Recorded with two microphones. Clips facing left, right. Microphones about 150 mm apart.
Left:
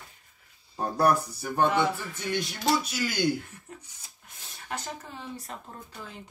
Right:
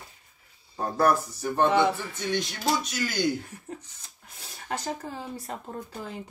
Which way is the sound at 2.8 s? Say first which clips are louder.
Even; 10° left (ahead or behind).